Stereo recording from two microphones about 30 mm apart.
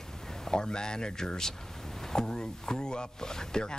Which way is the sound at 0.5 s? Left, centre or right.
Left.